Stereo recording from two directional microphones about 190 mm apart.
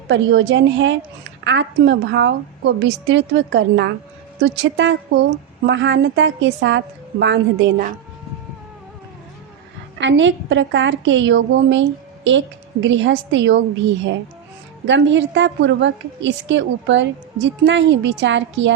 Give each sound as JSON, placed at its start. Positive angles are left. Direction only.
{"t": 0.1, "sound": "a woman's voice", "side_deg": -75}
{"t": 10.0, "sound": "a woman's voice", "side_deg": -75}
{"t": 14.8, "sound": "a woman's voice", "side_deg": -70}